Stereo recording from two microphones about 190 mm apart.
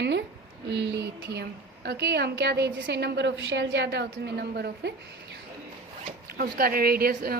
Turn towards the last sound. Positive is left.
turn(degrees=-50)  # may be behind; listen again after turning